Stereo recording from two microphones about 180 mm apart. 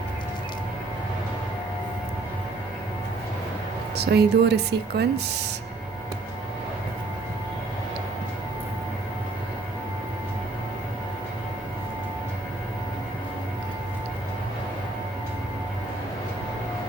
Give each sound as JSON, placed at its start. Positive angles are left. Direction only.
{"t": 3.9, "sound": "speech", "side_deg": -65}